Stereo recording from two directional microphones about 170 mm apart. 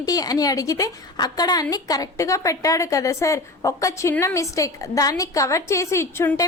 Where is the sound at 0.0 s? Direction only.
20° left (ahead or behind).